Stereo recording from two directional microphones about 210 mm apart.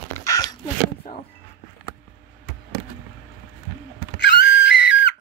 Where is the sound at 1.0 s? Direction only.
40° left (ahead or behind).